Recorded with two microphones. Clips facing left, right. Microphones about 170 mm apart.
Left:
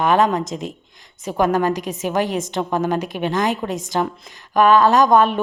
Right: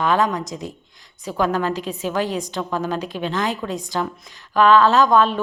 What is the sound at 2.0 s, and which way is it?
A woman's voice, 20° left (ahead or behind).